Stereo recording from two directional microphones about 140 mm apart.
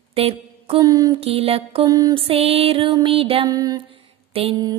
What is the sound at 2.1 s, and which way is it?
Music, 45° right (ahead or behind).